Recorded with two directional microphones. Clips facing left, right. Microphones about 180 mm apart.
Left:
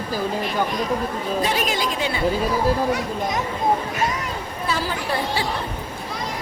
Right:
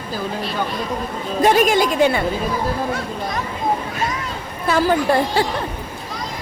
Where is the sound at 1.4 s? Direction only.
50° right (ahead or behind).